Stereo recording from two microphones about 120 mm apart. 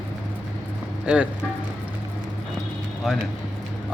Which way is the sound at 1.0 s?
10° right (ahead or behind).